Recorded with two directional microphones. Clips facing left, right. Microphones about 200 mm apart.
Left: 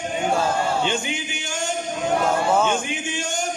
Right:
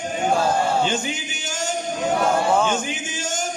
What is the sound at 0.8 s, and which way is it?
Music, 40° right (ahead or behind).